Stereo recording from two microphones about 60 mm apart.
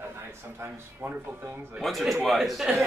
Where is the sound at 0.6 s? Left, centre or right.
Right.